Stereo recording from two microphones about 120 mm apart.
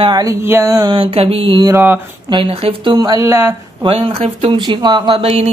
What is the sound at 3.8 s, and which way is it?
Speech, 45° right (ahead or behind).